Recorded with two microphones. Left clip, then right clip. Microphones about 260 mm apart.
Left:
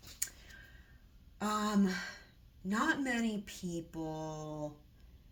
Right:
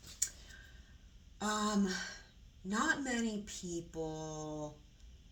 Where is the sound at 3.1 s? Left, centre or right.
Left.